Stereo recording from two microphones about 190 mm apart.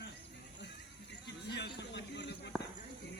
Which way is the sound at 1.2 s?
65° left (ahead or behind).